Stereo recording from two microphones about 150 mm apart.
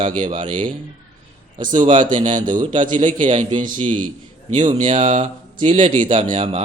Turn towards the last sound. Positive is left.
turn(degrees=-40)  # may be behind; listen again after turning